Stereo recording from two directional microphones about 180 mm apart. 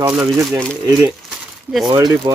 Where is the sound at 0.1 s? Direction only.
5° right (ahead or behind).